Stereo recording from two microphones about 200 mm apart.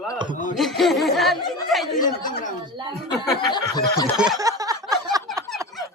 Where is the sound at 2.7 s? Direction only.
20° right (ahead or behind).